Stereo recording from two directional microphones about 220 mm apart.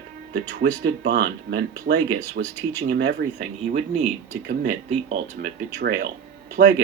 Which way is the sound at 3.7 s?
30° right (ahead or behind).